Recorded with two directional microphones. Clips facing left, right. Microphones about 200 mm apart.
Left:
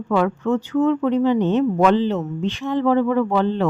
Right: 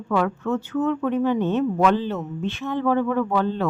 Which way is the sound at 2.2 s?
5° left (ahead or behind).